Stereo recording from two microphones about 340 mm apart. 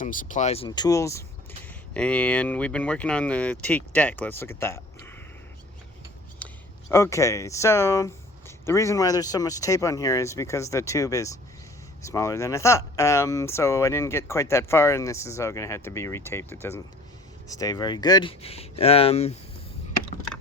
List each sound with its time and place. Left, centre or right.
0.0 s speech: left; by 5.1 s centre
6.4 s a sound: centre
6.9 s speech: centre